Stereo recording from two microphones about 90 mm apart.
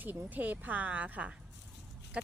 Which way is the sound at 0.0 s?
20° right (ahead or behind).